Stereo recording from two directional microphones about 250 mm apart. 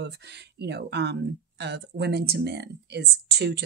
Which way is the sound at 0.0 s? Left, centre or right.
Right.